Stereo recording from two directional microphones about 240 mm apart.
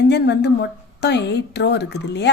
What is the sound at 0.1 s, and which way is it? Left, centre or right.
A woman's voice, left.